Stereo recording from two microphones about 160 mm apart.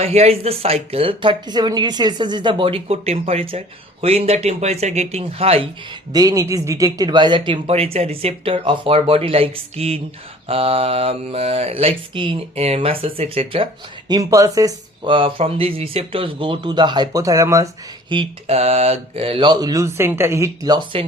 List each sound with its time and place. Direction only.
0.0 s speech: 40° right (ahead or behind)
6.1 s speech: 20° right (ahead or behind)
14.1 s speech: 20° right (ahead or behind)
18.1 s speech: 35° right (ahead or behind)